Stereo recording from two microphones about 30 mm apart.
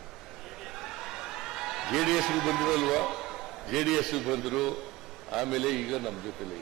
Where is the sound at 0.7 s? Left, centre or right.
Centre.